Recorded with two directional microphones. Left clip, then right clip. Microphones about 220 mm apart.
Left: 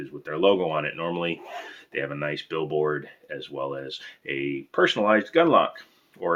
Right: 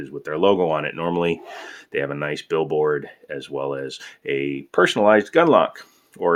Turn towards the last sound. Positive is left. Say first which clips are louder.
# right 7 dB
turn(degrees=-55)  # may be behind; listen again after turning